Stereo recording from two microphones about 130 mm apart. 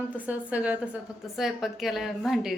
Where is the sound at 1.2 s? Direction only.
Centre (ahead or behind).